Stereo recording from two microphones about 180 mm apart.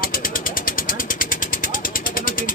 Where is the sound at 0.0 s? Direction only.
55° left (ahead or behind).